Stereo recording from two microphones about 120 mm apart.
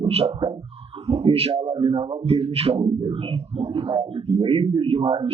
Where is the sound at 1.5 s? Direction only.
45° right (ahead or behind).